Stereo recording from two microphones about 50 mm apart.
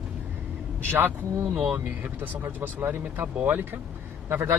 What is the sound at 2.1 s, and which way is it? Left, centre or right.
Speech, right.